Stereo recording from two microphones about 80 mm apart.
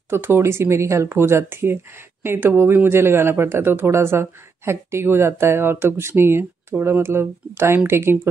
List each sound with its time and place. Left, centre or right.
0.1 s speech: right